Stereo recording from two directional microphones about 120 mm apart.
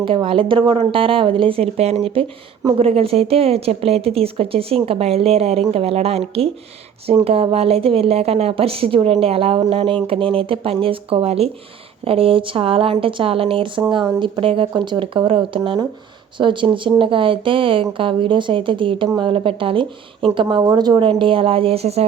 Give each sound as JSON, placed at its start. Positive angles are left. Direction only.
{"t": 0.0, "sound": "a woman's voice", "side_deg": -45}